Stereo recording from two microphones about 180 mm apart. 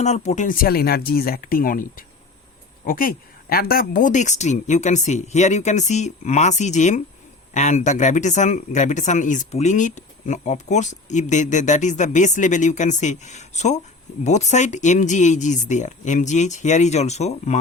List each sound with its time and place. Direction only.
0.0 s speech: 40° left (ahead or behind)